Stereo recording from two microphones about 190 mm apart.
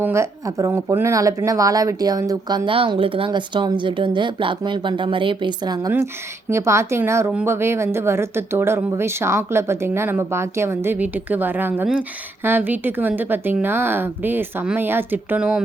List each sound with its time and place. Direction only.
0.0 s a woman's voice: 15° right (ahead or behind)